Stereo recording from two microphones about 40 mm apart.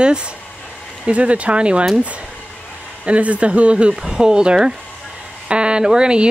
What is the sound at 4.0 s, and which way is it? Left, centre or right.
A woman's voice, centre.